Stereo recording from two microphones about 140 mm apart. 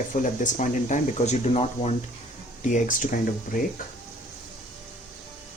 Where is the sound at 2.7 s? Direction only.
70° left (ahead or behind).